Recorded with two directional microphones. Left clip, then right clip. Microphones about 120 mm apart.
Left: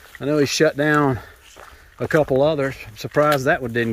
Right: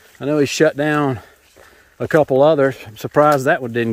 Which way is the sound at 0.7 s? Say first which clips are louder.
Even; 10° right (ahead or behind).